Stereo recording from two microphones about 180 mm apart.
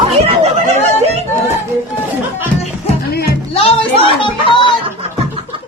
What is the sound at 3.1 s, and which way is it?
Music, 60° left (ahead or behind).